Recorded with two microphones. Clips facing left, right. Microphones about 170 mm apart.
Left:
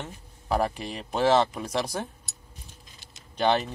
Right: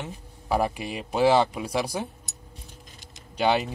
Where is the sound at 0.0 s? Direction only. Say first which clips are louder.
Right 2 dB; 10° right (ahead or behind).